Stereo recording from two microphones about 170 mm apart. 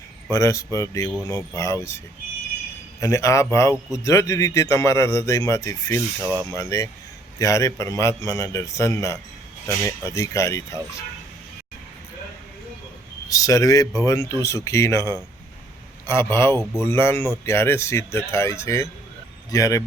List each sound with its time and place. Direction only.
0.3 s speech: 20° left (ahead or behind)
3.0 s speech: 20° left (ahead or behind)
13.2 s speech: 20° left (ahead or behind)